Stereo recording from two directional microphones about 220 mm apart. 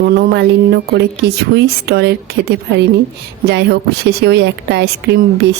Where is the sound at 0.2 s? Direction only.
45° right (ahead or behind).